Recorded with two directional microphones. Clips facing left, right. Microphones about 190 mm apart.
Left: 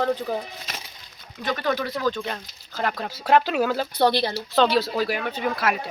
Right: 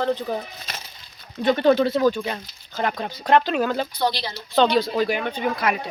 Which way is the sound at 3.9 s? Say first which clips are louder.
Left 4 dB; 60° left (ahead or behind).